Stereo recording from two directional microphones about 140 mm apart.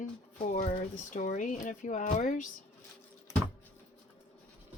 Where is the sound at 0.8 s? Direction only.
65° left (ahead or behind).